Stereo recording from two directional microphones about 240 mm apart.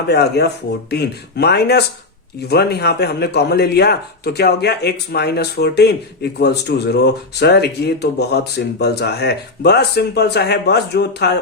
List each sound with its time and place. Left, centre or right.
0.1 s speech: left